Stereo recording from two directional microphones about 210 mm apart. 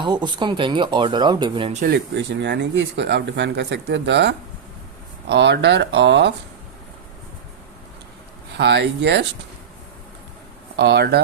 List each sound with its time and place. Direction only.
0.0 s speech: 20° right (ahead or behind)
1.8 s speech: 55° right (ahead or behind)
8.5 s speech: 55° right (ahead or behind)
10.8 s speech: 50° right (ahead or behind)